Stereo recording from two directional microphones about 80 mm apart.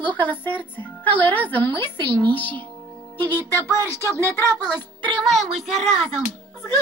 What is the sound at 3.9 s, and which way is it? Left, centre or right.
Speech, right.